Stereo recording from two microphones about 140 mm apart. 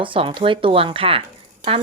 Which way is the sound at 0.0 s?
40° right (ahead or behind).